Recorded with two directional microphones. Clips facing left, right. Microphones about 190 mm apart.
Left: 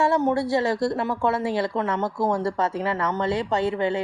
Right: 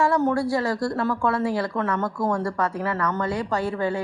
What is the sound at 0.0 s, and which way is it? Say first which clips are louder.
Speech: even; 20° left (ahead or behind).